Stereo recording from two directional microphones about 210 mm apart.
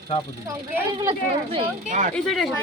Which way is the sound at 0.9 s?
25° right (ahead or behind).